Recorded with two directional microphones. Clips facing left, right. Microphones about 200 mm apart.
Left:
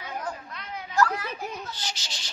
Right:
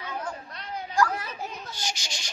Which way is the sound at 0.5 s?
35° right (ahead or behind).